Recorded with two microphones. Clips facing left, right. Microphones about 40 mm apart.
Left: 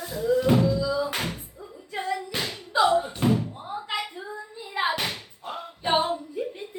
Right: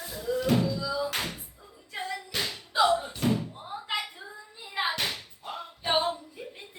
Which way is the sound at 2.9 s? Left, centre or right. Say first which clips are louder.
Left 4 dB; left.